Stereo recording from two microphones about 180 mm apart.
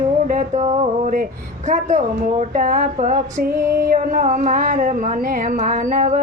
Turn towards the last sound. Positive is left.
turn(degrees=-50)  # may be behind; listen again after turning